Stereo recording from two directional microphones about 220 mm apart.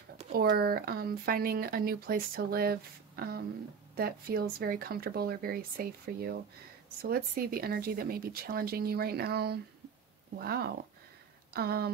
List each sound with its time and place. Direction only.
0.3 s speech: 45° right (ahead or behind)